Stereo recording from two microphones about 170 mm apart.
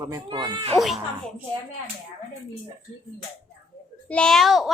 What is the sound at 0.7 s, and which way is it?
Speech, centre (ahead or behind).